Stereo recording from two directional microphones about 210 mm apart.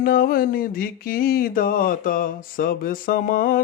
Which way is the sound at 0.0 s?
45° left (ahead or behind).